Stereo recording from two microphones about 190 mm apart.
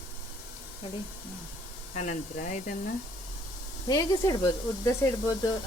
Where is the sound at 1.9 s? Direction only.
40° left (ahead or behind).